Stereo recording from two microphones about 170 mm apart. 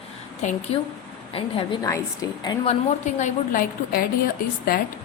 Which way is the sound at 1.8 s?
20° left (ahead or behind).